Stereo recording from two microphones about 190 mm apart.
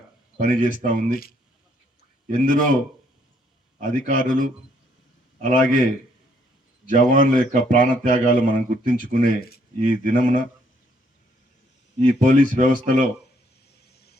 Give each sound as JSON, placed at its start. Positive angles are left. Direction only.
{"t": 0.3, "sound": "speech", "side_deg": -45}
{"t": 1.1, "sound": "speech", "side_deg": 50}
{"t": 2.2, "sound": "speech", "side_deg": -45}
{"t": 3.8, "sound": "a man's voice", "side_deg": -45}
{"t": 11.9, "sound": "speech", "side_deg": -45}
{"t": 13.9, "sound": "vehicle", "side_deg": 55}